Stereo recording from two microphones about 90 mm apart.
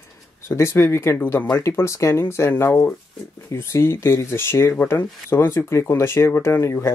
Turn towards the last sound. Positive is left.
turn(degrees=30)  # may be behind; listen again after turning